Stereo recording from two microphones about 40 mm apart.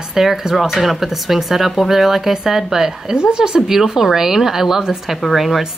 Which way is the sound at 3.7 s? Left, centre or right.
Centre.